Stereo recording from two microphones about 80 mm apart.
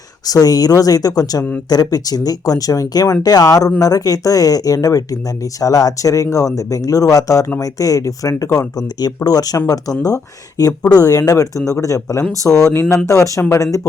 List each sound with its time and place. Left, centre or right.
0.3 s speech: left
12.7 s speech: left
13.1 s speech: left